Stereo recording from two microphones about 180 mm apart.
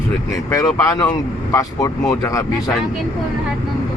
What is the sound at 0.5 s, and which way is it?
Speech, 15° left (ahead or behind).